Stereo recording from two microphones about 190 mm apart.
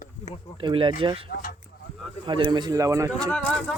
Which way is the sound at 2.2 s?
25° right (ahead or behind).